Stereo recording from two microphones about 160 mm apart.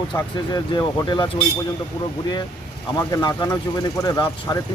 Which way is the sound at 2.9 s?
25° left (ahead or behind).